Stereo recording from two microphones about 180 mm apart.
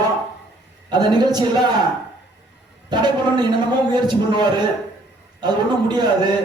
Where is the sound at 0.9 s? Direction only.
25° right (ahead or behind).